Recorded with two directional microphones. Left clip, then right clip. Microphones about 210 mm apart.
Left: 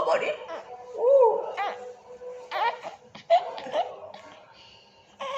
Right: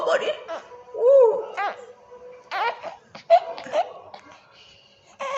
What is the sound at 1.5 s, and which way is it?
Dog, 20° right (ahead or behind).